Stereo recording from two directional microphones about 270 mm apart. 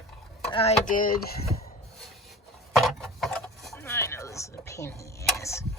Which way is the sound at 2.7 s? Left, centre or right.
Centre.